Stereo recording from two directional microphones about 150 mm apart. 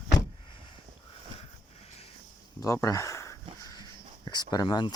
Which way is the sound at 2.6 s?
20° left (ahead or behind).